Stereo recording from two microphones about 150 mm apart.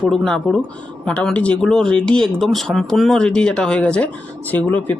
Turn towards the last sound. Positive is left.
turn(degrees=10)  # may be behind; listen again after turning